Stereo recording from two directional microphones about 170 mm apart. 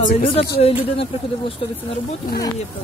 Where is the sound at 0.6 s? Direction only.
35° left (ahead or behind).